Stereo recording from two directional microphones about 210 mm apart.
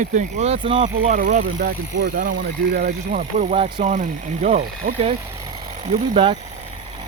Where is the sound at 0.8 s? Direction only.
35° right (ahead or behind).